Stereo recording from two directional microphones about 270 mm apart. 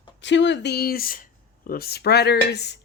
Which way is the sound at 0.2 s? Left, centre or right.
Left.